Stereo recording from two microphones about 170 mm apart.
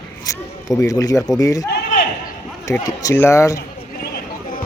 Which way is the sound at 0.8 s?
20° left (ahead or behind).